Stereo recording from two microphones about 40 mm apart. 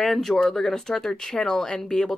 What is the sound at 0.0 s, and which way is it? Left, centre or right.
Speech, centre.